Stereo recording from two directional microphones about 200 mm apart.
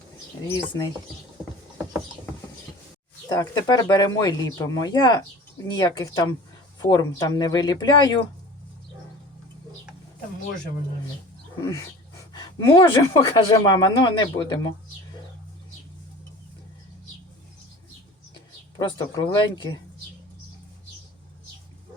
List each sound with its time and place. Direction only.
0.4 s speech: 20° left (ahead or behind)
3.2 s speech: 20° left (ahead or behind)
11.6 s dog: 15° left (ahead or behind)
12.5 s speech: 20° left (ahead or behind)
18.8 s speech: 20° left (ahead or behind)